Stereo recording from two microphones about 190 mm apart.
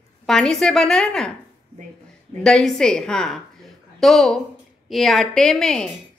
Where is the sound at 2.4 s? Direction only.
Centre (ahead or behind).